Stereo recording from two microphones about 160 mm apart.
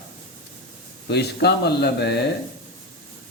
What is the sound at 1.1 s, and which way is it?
A man's voice, 90° left.